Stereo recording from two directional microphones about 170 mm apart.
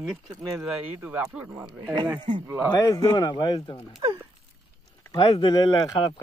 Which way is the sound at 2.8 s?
20° left (ahead or behind).